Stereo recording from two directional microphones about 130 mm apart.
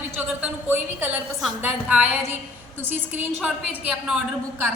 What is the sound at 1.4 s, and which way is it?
A woman's voice, 5° right (ahead or behind).